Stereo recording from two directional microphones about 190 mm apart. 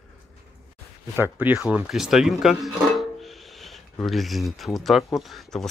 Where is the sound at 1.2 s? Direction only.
10° right (ahead or behind).